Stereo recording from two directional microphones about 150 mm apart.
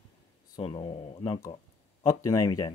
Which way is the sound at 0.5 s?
35° left (ahead or behind).